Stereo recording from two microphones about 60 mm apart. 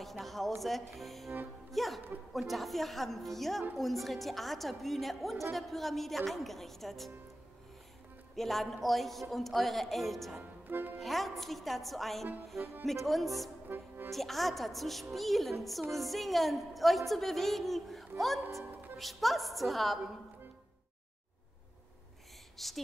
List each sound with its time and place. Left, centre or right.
0.0 s a sound: centre
0.6 s a woman's voice: centre
1.7 s music: centre
2.3 s a woman's voice: centre
8.4 s a woman's voice: centre
10.7 s speech: right
11.0 s a woman's voice: centre
13.7 s music: right
14.1 s a woman's voice: centre
22.6 s a woman's voice: centre